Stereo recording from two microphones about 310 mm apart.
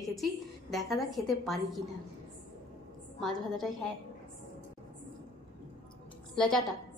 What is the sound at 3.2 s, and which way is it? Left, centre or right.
Speech, centre.